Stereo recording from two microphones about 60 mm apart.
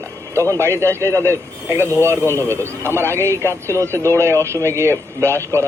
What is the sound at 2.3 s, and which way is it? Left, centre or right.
Speech, left.